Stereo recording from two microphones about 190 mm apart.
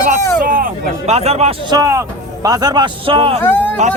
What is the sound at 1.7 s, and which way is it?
A man's voice, 15° right (ahead or behind).